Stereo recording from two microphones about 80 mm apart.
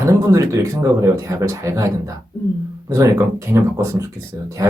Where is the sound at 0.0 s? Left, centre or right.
Right.